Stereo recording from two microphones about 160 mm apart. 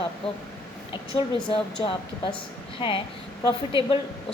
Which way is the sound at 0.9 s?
30° left (ahead or behind).